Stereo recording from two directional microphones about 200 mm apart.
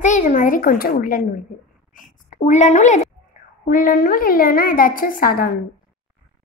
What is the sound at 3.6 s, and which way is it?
A woman's voice, 45° left (ahead or behind).